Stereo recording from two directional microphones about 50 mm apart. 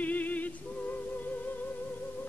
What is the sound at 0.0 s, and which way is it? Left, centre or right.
Music, left.